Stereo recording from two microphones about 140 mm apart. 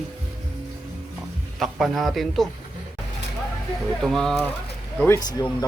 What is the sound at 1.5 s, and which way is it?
Speech, centre (ahead or behind).